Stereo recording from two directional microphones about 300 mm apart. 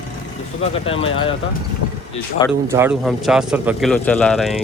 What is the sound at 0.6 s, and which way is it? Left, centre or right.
Speech, centre.